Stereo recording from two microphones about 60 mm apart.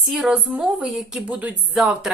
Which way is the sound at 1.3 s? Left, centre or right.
Right.